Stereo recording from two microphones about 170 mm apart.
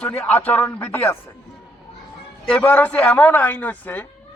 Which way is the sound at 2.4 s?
10° left (ahead or behind).